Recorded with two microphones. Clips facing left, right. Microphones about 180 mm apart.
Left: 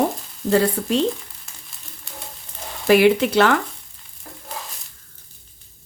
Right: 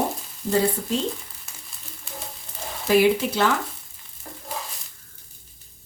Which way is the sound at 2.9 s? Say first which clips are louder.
Left 4 dB; 70° left (ahead or behind).